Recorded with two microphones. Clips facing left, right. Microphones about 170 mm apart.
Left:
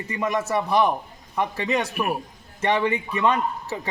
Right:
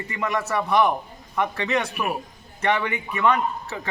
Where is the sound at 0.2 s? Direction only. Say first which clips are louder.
Left 1 dB; 20° left (ahead or behind).